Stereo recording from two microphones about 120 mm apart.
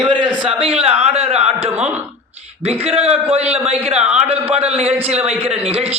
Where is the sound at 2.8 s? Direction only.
60° right (ahead or behind).